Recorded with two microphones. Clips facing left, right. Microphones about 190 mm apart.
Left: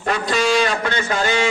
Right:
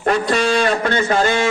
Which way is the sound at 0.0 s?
55° right (ahead or behind).